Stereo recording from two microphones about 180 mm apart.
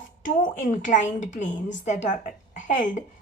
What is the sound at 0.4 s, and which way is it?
A woman's voice, 45° left (ahead or behind).